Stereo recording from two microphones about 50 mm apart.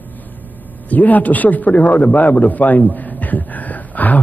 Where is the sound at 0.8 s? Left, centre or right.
Left.